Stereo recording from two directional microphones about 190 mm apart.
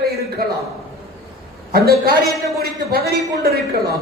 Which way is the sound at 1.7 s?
55° right (ahead or behind).